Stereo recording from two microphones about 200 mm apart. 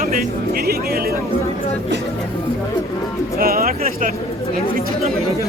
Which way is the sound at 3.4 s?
45° right (ahead or behind).